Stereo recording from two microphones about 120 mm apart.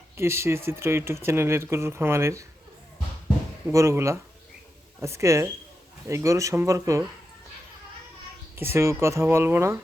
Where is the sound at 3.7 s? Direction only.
25° right (ahead or behind).